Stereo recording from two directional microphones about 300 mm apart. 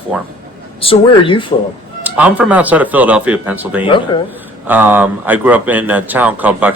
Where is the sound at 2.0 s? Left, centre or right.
Centre.